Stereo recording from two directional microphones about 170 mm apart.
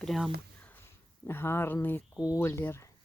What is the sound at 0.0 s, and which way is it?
Speech, centre (ahead or behind).